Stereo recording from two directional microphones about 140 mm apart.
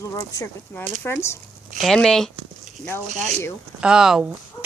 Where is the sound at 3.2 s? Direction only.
60° right (ahead or behind).